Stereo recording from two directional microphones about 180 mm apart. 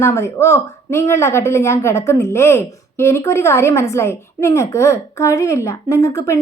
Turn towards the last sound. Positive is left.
turn(degrees=15)  # may be behind; listen again after turning